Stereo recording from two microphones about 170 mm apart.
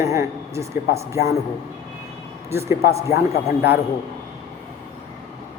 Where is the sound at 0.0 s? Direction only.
15° right (ahead or behind).